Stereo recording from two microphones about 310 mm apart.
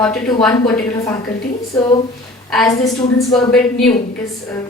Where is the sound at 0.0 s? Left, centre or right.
Centre.